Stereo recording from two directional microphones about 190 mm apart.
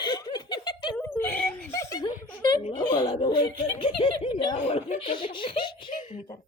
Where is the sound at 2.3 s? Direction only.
30° left (ahead or behind).